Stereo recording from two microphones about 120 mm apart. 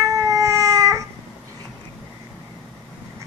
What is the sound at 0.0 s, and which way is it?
Baby cry, 30° right (ahead or behind).